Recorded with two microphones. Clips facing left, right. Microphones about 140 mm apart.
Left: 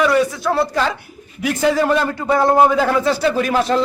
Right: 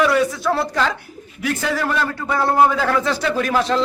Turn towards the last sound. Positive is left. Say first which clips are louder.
# left 3 dB
turn(degrees=10)  # may be behind; listen again after turning